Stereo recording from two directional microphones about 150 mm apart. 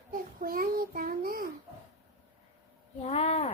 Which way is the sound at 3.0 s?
45° left (ahead or behind).